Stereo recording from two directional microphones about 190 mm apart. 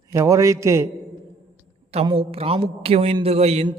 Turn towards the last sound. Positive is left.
turn(degrees=-35)  # may be behind; listen again after turning